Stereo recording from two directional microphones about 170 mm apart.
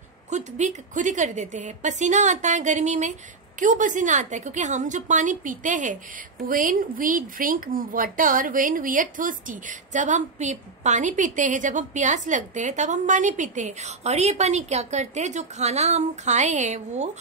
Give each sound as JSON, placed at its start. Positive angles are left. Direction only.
{"t": 0.3, "sound": "a woman's voice", "side_deg": -45}